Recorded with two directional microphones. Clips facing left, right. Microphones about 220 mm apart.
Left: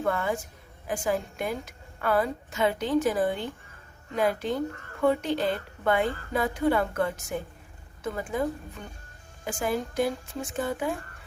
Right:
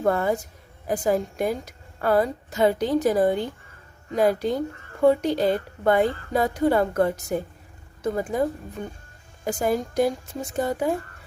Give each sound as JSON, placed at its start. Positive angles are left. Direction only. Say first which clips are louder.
{"t": 0.0, "sound": "speech", "louder": "right 5 dB", "side_deg": -40}